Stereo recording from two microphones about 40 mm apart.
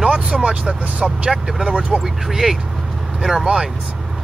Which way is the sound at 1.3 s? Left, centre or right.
Centre.